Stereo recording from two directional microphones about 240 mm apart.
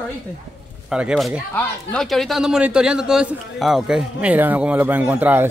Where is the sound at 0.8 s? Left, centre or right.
Centre.